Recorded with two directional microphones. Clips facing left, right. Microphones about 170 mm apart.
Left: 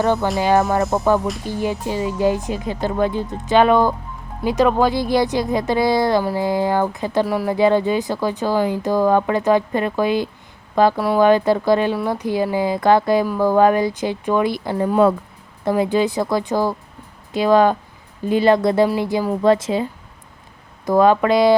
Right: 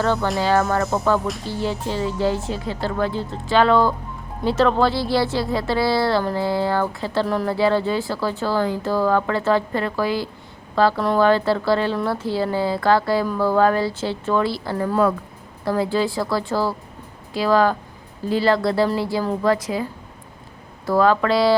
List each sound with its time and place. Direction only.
0.0 s speech: 15° left (ahead or behind)